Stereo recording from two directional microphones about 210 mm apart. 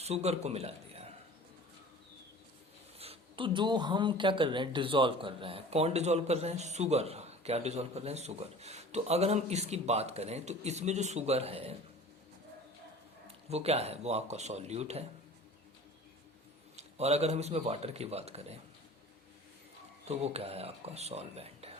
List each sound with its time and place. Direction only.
0.0 s speech: 30° right (ahead or behind)
3.0 s speech: 25° right (ahead or behind)
13.2 s speech: 30° right (ahead or behind)
16.7 s a man's voice: 30° right (ahead or behind)
20.1 s a man's voice: 30° right (ahead or behind)